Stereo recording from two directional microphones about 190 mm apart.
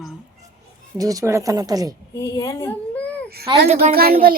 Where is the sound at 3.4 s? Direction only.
30° right (ahead or behind).